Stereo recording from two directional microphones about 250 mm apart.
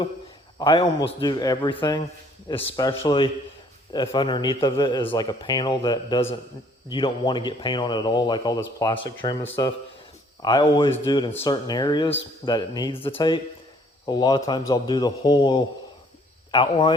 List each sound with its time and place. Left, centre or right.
0.6 s a man's voice: centre